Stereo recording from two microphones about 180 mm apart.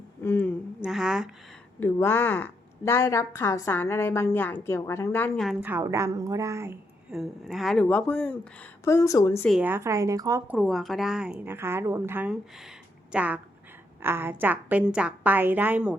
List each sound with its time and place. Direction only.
0.2 s speech: 10° left (ahead or behind)
0.8 s speech: 5° right (ahead or behind)
1.8 s a woman's voice: 10° left (ahead or behind)
5.6 s a woman's voice: 15° right (ahead or behind)
7.1 s a woman's voice: centre (ahead or behind); by 9.5 s 15° left (ahead or behind)
9.5 s a woman's voice: 10° right (ahead or behind)
10.5 s a woman's voice: centre (ahead or behind)